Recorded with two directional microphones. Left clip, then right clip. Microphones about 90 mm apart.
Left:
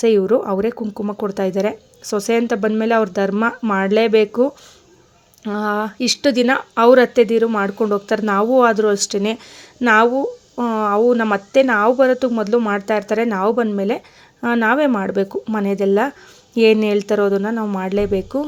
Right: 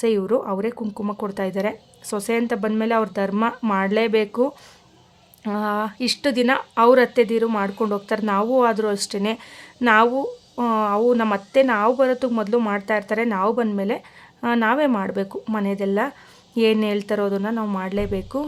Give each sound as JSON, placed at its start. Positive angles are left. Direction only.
{"t": 0.0, "sound": "speech", "side_deg": 35}
{"t": 5.5, "sound": "speech", "side_deg": 30}
{"t": 10.5, "sound": "speech", "side_deg": 15}